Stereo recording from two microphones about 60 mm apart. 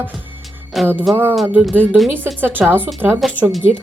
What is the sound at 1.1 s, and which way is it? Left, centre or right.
Speech, right.